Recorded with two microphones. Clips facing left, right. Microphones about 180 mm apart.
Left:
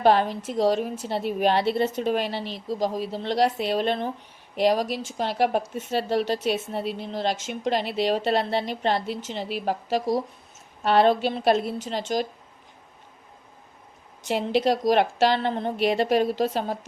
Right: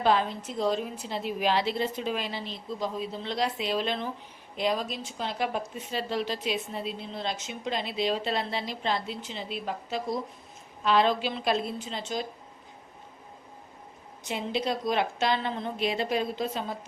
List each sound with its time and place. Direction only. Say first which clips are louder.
0.0 s a woman's voice: left 5 dB; 65° left (ahead or behind)
4.5 s a woman's voice: left 7 dB; 70° left (ahead or behind)
10.8 s a woman's voice: left 5 dB; 60° left (ahead or behind)
11.9 s a woman's voice: left 7 dB; 75° left (ahead or behind)
14.3 s a woman's voice: left 7 dB; 75° left (ahead or behind)